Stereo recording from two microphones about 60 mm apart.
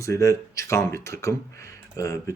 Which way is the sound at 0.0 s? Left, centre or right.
Left.